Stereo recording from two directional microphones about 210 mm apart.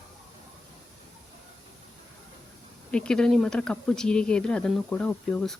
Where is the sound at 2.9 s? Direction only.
5° left (ahead or behind).